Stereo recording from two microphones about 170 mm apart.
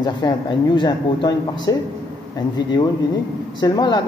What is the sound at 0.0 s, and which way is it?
Speech, 25° left (ahead or behind).